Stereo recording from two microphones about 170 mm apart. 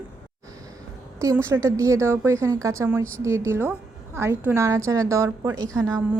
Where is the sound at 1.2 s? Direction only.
15° right (ahead or behind).